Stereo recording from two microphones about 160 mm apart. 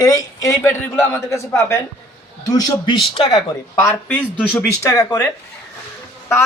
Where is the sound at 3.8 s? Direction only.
15° left (ahead or behind).